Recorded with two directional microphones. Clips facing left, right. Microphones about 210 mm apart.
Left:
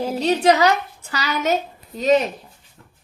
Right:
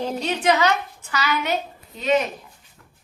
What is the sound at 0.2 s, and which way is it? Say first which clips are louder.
Speech: left 5 dB; 35° left (ahead or behind).